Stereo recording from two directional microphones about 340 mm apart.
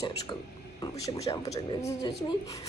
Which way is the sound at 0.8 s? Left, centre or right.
Centre.